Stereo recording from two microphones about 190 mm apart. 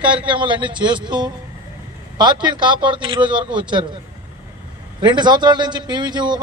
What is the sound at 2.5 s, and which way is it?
Speech, 25° right (ahead or behind).